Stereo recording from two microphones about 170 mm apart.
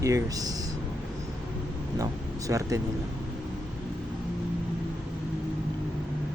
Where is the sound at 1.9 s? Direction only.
20° right (ahead or behind).